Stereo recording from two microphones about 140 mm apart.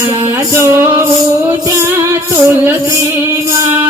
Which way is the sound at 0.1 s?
20° right (ahead or behind).